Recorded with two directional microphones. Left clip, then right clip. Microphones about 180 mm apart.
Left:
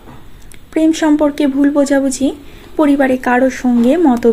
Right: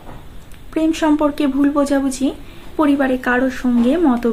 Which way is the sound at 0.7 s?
25° left (ahead or behind).